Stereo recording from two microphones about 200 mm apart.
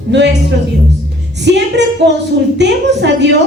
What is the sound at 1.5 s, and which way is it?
A woman's voice, 60° right (ahead or behind).